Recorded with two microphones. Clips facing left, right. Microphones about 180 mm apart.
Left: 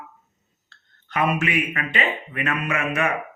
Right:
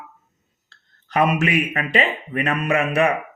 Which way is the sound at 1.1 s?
35° right (ahead or behind).